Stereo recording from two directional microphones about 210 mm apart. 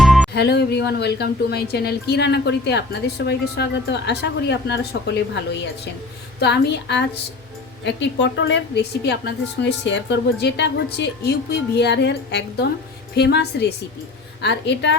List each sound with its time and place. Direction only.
0.0 s music: centre (ahead or behind)
0.3 s a woman's voice: 50° left (ahead or behind)
6.4 s a woman's voice: 55° left (ahead or behind)